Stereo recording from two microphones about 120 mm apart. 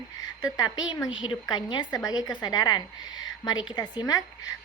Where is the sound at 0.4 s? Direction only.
30° left (ahead or behind).